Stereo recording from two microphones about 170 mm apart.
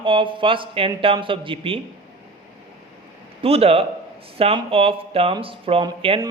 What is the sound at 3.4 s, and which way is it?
Speech, 35° right (ahead or behind).